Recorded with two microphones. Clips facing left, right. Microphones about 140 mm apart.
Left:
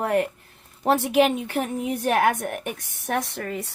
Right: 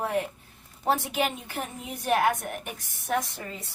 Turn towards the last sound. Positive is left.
turn(degrees=65)  # may be behind; listen again after turning